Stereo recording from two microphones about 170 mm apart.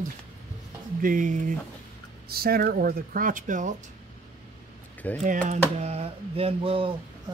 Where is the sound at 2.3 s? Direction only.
65° right (ahead or behind).